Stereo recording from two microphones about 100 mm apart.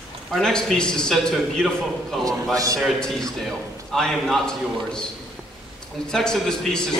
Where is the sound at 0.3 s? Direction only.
5° left (ahead or behind).